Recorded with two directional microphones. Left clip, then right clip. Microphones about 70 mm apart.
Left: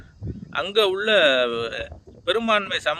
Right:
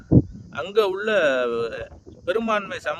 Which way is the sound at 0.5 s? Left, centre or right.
Right.